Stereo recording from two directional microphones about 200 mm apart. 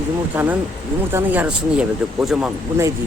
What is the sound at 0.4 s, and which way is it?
Speech, 5° right (ahead or behind).